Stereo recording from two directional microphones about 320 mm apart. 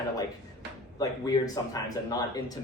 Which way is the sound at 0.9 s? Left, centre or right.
Centre.